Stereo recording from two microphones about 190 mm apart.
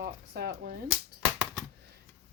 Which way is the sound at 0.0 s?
55° right (ahead or behind).